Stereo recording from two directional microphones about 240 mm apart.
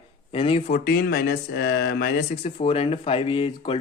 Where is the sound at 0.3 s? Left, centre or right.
Left.